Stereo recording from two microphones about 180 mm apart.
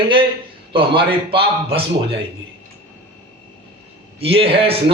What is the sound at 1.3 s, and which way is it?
Speech, 30° right (ahead or behind).